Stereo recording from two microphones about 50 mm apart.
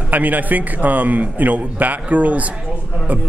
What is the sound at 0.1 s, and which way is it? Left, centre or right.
Speech, right.